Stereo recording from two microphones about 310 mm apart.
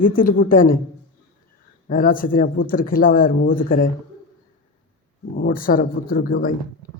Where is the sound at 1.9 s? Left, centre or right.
Left.